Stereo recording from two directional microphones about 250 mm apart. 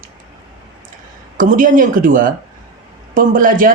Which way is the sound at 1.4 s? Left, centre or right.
Right.